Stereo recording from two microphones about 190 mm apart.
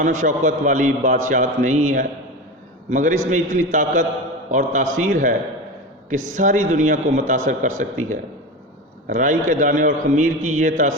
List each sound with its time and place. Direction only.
0.0 s a man's voice: 40° right (ahead or behind)
6.3 s a man's voice: 40° right (ahead or behind)